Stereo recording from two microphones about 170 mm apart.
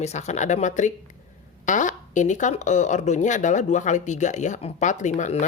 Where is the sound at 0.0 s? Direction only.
40° left (ahead or behind).